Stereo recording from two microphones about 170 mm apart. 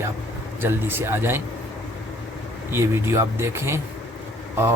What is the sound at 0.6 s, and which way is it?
Speech, 15° right (ahead or behind).